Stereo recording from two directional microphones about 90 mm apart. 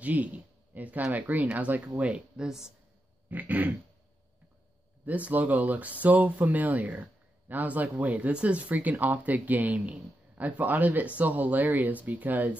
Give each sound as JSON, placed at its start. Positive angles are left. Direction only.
{"t": 0.0, "sound": "speech", "side_deg": -15}
{"t": 3.3, "sound": "speech", "side_deg": -20}
{"t": 5.0, "sound": "speech", "side_deg": -15}